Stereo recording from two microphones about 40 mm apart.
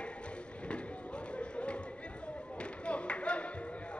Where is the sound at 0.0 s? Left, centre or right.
Left.